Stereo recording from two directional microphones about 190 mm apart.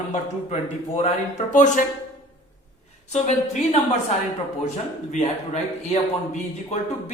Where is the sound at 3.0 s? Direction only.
35° left (ahead or behind).